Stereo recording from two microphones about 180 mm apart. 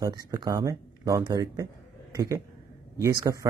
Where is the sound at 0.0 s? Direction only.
20° right (ahead or behind).